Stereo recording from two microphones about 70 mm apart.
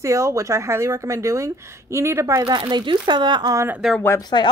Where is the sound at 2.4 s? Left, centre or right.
Right.